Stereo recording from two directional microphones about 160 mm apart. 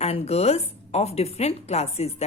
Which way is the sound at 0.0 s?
40° left (ahead or behind).